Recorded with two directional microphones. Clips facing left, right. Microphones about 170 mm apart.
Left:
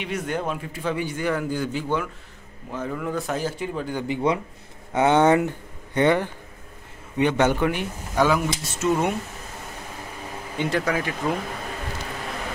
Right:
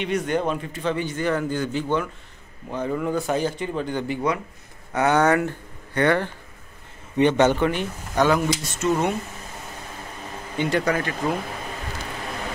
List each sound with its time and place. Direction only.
0.0 s a man's voice: 5° left (ahead or behind)
4.1 s a man's voice: 25° left (ahead or behind)
7.2 s speech: 5° left (ahead or behind)
10.5 s speech: centre (ahead or behind)